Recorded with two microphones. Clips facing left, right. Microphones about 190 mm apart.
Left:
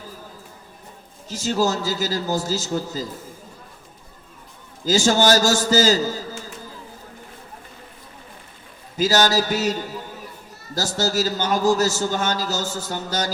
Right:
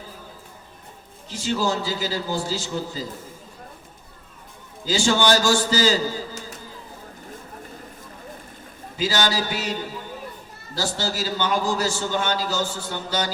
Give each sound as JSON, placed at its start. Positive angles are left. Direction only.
{"t": 1.3, "sound": "a man's voice", "side_deg": 40}
{"t": 4.9, "sound": "a man's voice", "side_deg": 40}
{"t": 9.0, "sound": "a man's voice", "side_deg": 40}
{"t": 10.8, "sound": "a man's voice", "side_deg": 45}